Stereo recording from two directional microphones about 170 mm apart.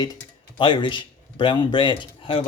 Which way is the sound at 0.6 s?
30° left (ahead or behind).